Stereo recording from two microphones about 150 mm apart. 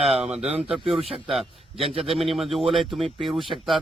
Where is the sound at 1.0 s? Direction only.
40° right (ahead or behind).